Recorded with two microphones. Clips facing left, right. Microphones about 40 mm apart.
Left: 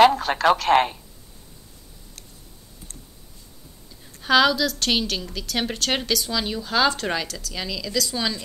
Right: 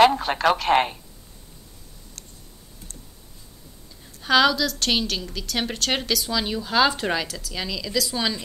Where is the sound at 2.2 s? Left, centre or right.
Centre.